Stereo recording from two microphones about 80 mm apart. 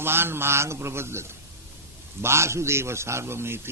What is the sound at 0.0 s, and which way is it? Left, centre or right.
A man's voice, right.